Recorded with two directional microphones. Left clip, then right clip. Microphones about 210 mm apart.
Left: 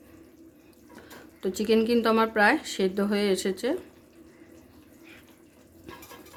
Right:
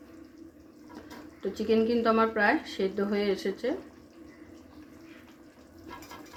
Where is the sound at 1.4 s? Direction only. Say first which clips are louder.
Left 2 dB; 45° left (ahead or behind).